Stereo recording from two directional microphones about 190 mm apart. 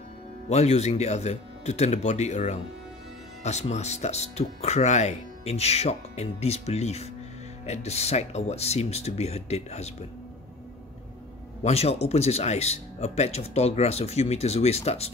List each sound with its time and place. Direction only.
0.5 s speech: 35° left (ahead or behind)
11.6 s speech: 35° left (ahead or behind)